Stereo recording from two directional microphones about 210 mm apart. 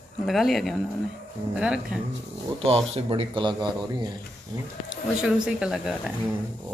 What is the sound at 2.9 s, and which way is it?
Speech, 25° right (ahead or behind).